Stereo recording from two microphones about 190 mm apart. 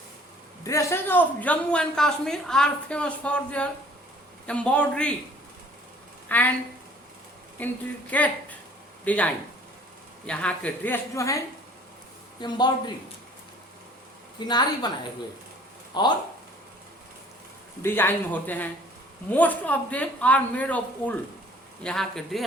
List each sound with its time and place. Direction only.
0.6 s a man's voice: 15° left (ahead or behind)
6.2 s speech: 10° left (ahead or behind)
7.6 s a man's voice: 10° left (ahead or behind)
14.3 s a woman's voice: 20° left (ahead or behind)
15.9 s a woman's voice: 20° left (ahead or behind)
17.8 s a man's voice: 10° left (ahead or behind)